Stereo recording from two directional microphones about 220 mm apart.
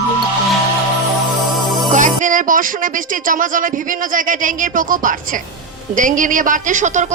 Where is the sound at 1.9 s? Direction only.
35° right (ahead or behind).